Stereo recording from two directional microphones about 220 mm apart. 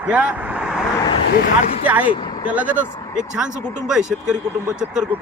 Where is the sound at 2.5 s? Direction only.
5° right (ahead or behind).